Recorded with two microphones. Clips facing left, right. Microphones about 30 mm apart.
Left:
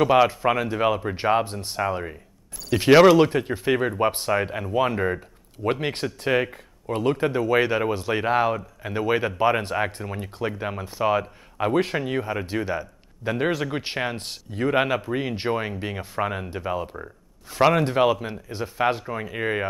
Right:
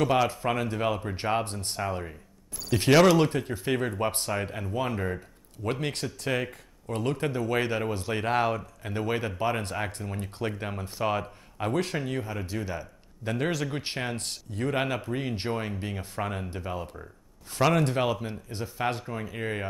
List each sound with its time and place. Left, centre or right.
0.0 s a man's voice: left
8.3 s a man's voice: centre
11.5 s a man's voice: left